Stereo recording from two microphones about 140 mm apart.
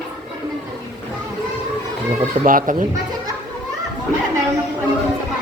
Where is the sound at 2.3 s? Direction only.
80° right.